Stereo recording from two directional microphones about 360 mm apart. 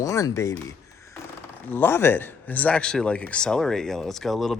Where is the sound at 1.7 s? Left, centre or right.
Centre.